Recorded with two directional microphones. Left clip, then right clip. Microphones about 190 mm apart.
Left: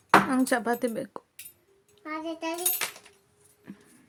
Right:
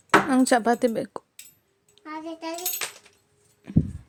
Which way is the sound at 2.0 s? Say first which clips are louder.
Left 1 dB; 10° left (ahead or behind).